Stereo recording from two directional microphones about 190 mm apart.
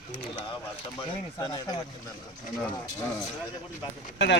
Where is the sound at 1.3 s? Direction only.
20° left (ahead or behind).